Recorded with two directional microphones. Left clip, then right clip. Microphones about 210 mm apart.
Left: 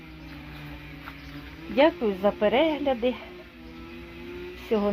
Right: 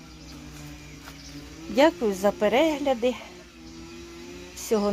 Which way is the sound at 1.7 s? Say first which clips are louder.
Right 1 dB; 15° right (ahead or behind).